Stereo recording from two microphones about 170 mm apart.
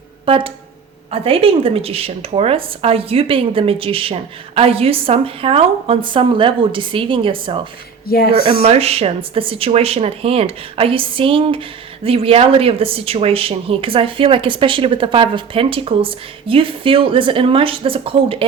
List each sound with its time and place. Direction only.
0.3 s speech: 30° right (ahead or behind)
8.0 s a woman's voice: 65° left (ahead or behind)
8.6 s speech: 35° right (ahead or behind)